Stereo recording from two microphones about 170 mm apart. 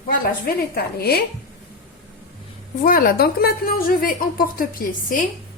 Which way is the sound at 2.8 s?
60° left (ahead or behind).